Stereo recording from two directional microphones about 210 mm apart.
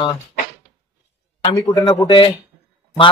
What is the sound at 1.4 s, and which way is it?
Speech, 20° left (ahead or behind).